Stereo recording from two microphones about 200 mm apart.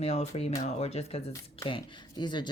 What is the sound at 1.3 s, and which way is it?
Speech, 20° left (ahead or behind).